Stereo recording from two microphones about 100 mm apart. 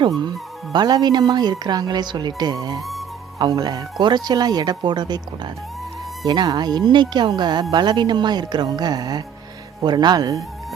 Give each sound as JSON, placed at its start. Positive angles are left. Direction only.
{"t": 0.2, "sound": "a woman's voice", "side_deg": -45}